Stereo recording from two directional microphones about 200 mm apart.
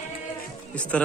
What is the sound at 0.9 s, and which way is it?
Speech, 5° left (ahead or behind).